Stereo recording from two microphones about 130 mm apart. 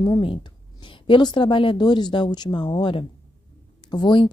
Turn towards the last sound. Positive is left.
turn(degrees=35)  # may be behind; listen again after turning